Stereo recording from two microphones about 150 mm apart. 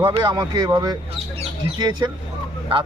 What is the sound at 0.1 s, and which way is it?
Speech, 30° right (ahead or behind).